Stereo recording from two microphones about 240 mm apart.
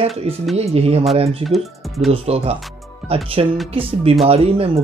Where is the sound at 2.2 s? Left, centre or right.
Right.